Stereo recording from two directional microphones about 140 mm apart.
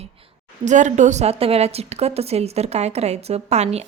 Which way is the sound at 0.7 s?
60° right (ahead or behind).